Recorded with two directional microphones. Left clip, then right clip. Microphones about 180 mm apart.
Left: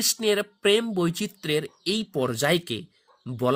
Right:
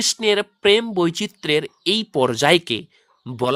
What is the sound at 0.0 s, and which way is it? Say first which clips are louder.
Speech: right 5 dB; 20° right (ahead or behind).